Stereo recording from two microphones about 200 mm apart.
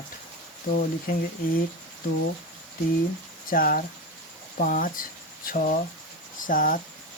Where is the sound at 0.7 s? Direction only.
45° left (ahead or behind).